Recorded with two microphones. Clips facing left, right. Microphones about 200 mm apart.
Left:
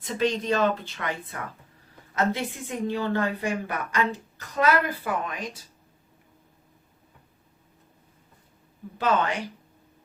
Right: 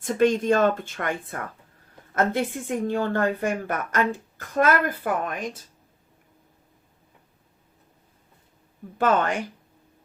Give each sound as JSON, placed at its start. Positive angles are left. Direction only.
{"t": 0.0, "sound": "a woman's voice", "side_deg": -50}
{"t": 9.0, "sound": "a woman's voice", "side_deg": -50}